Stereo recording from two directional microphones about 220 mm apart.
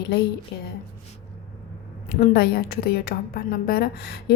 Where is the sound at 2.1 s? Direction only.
45° left (ahead or behind).